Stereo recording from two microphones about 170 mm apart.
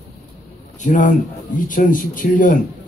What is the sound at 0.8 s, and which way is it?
Speech, 50° left (ahead or behind).